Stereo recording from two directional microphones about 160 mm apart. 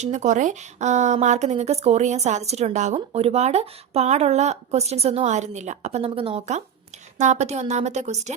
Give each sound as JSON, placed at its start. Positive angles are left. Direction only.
{"t": 0.0, "sound": "a woman's voice", "side_deg": -50}
{"t": 7.2, "sound": "a woman's voice", "side_deg": -45}